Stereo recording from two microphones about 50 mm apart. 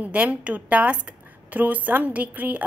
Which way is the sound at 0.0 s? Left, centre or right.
Right.